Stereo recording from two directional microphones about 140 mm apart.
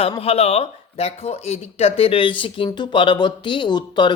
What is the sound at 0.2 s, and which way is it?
A woman's voice, 45° left (ahead or behind).